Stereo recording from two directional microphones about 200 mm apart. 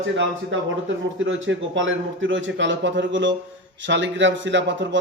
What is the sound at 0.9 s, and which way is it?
A man's voice, 70° right (ahead or behind).